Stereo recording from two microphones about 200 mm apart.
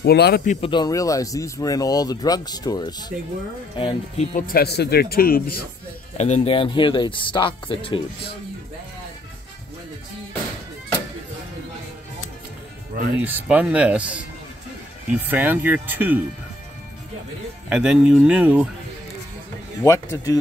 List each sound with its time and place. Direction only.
0.0 s speech: 55° left (ahead or behind)
0.5 s speech: 25° left (ahead or behind); by 5.6 s 45° left (ahead or behind)
6.1 s speech: 35° left (ahead or behind)
13.2 s speech: 10° right (ahead or behind)
17.6 s speech: 5° right (ahead or behind)
19.8 s speech: 15° left (ahead or behind)